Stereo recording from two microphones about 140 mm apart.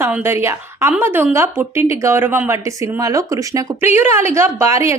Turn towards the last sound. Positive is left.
turn(degrees=-20)  # may be behind; listen again after turning